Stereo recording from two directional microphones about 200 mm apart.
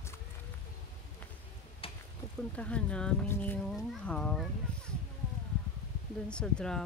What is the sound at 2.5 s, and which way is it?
Speech, 5° left (ahead or behind).